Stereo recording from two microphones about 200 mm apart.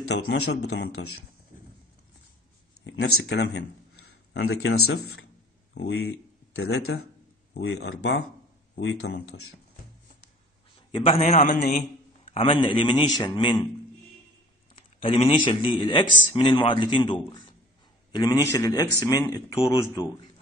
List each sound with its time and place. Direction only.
0.1 s speech: 60° left (ahead or behind)
2.8 s a man's voice: 60° left (ahead or behind); by 4.9 s 90° left
6.5 s speech: 90° left
7.5 s speech: 55° left (ahead or behind)
8.7 s speech: 80° left
10.9 s a man's voice: 30° left (ahead or behind)
12.3 s a man's voice: 25° left (ahead or behind)
14.8 s a man's voice: 30° left (ahead or behind)